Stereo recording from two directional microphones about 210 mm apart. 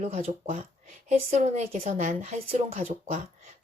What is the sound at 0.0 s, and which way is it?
Speech, 30° right (ahead or behind).